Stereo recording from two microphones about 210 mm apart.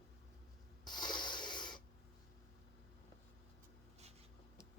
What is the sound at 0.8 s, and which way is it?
Wheeze, 20° left (ahead or behind).